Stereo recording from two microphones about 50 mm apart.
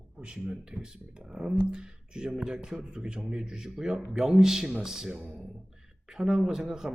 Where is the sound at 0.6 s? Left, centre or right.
Centre.